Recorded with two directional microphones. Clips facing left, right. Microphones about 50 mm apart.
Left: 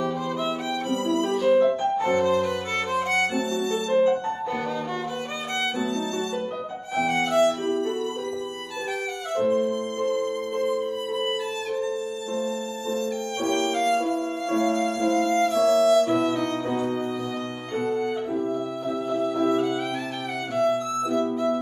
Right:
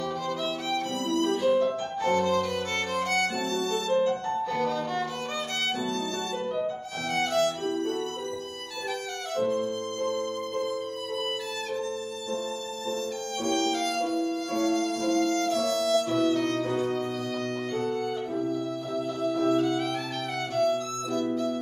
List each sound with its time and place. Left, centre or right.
1.0 s violin: left
7.0 s violin: left
9.3 s music: centre
12.9 s violin: left
17.7 s music: left
19.1 s violin: left